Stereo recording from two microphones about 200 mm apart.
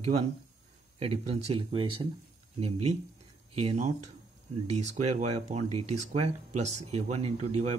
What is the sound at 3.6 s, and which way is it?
Speech, 35° right (ahead or behind).